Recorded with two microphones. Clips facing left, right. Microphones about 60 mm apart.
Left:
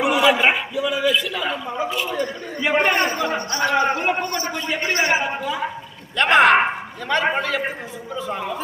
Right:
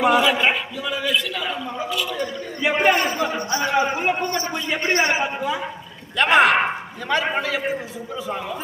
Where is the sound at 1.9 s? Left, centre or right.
Left.